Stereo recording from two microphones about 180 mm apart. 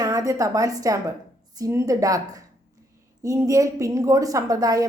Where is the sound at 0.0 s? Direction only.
20° right (ahead or behind).